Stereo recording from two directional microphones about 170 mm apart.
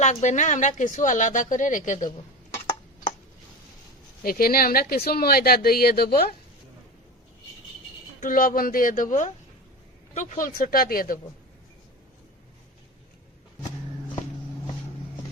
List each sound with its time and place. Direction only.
0.0 s a woman's voice: 45° left (ahead or behind)
4.2 s speech: 60° left (ahead or behind)
8.2 s a woman's voice: 55° left (ahead or behind)